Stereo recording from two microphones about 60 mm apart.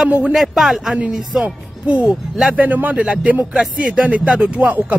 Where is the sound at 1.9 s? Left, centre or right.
Right.